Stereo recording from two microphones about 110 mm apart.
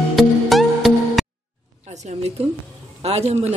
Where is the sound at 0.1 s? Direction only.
Centre (ahead or behind).